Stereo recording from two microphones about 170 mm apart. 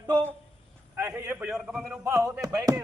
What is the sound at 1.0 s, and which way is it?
Speech, 15° right (ahead or behind).